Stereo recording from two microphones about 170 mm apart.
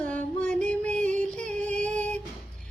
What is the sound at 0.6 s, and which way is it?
Music, 5° left (ahead or behind).